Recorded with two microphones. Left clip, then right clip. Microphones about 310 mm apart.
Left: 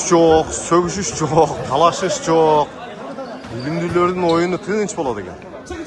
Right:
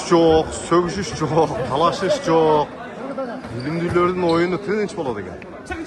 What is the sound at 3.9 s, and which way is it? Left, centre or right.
Speech, centre.